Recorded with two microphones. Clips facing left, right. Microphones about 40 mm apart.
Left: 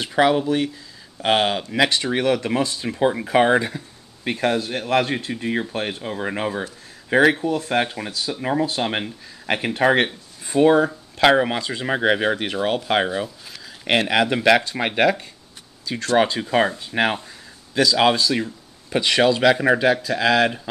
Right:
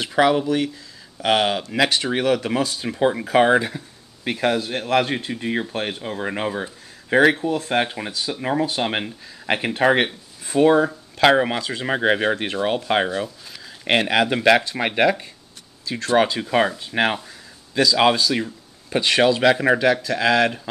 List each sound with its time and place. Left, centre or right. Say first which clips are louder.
0.0 s speech: even; centre
1.2 s speech: even; centre
1.7 s speech: left 1 dB; centre
7.9 s speech: even; centre